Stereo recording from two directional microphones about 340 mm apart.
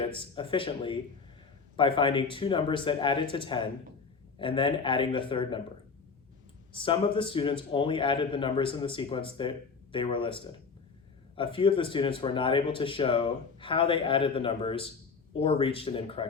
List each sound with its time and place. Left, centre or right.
0.0 s a man's voice: centre
6.7 s a man's voice: centre